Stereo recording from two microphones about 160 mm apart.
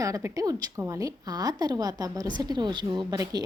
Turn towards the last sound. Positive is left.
turn(degrees=-25)  # may be behind; listen again after turning